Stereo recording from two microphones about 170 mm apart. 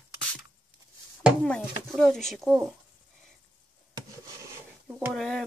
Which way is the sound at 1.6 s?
Centre (ahead or behind).